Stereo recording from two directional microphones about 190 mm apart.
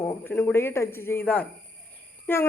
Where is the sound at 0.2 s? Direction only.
10° left (ahead or behind).